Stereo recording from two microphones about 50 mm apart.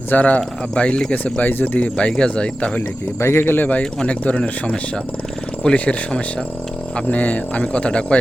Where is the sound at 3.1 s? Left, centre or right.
Left.